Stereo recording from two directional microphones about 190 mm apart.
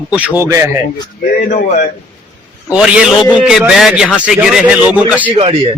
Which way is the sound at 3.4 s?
Centre (ahead or behind).